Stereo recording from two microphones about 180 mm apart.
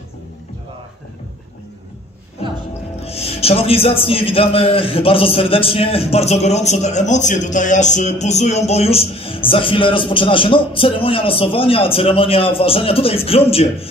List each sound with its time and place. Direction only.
3.0 s speech: 35° left (ahead or behind)